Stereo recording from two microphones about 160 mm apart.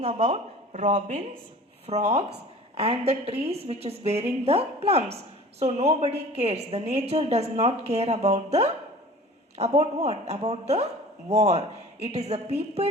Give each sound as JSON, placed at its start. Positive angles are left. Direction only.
{"t": 0.0, "sound": "a woman's voice", "side_deg": -40}